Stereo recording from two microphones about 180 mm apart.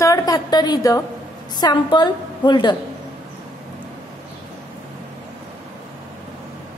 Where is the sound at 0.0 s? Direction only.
20° left (ahead or behind).